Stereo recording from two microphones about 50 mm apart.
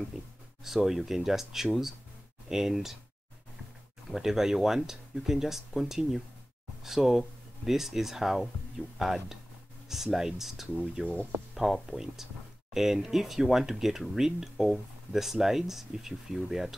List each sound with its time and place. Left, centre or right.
0.7 s speech: centre
4.1 s speech: centre
11.5 s speech: centre